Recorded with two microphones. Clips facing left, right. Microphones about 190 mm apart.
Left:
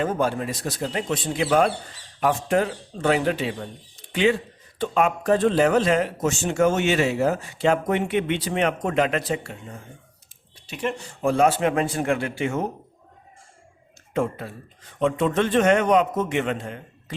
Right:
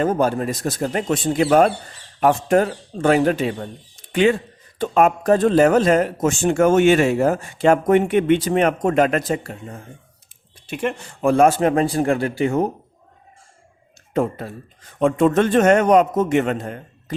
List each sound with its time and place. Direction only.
0.0 s speech: 40° right (ahead or behind)
10.7 s a man's voice: 55° right (ahead or behind); by 12.6 s 35° right (ahead or behind)
14.1 s speech: 40° right (ahead or behind)